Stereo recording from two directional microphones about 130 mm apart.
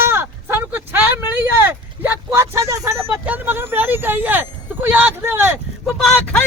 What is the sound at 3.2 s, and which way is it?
Vehicle, 15° right (ahead or behind).